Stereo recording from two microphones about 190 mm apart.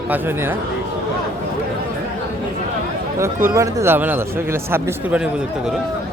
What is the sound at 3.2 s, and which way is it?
Speech, 15° right (ahead or behind).